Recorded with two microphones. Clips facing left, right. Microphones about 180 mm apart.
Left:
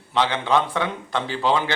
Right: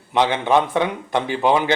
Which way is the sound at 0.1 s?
20° right (ahead or behind).